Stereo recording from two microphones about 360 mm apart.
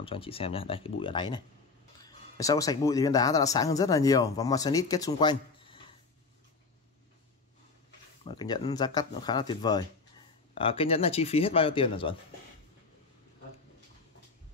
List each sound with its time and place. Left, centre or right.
0.0 s speech: centre
8.3 s speech: centre